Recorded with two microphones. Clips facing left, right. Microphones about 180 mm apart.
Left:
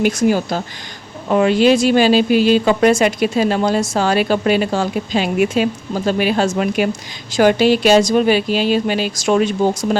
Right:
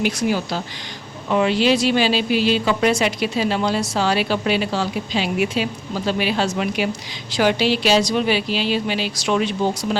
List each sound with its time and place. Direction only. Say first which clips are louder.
0.0 s speech: left 5 dB; 45° left (ahead or behind)